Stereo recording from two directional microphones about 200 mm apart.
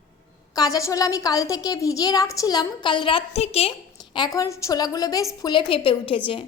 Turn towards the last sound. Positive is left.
turn(degrees=25)  # may be behind; listen again after turning